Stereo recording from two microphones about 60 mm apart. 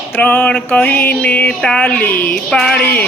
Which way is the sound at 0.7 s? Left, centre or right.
Left.